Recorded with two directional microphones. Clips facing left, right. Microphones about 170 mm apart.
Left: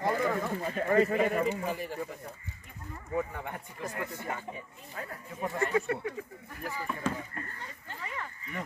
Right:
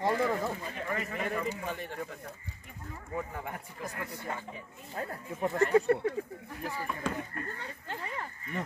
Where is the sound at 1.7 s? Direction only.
5° left (ahead or behind).